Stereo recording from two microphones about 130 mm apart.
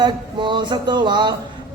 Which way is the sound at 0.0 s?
35° right (ahead or behind).